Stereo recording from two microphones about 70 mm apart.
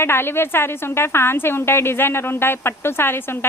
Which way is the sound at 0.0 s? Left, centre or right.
Left.